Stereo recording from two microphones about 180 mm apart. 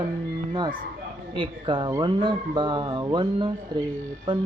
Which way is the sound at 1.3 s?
25° right (ahead or behind).